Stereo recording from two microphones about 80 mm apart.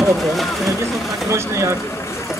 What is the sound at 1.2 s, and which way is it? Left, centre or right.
Speech, right.